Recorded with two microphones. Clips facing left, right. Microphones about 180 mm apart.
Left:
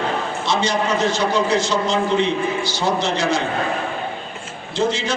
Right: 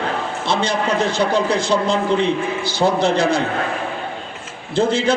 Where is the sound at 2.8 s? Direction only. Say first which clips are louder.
Right 6 dB; 55° right (ahead or behind).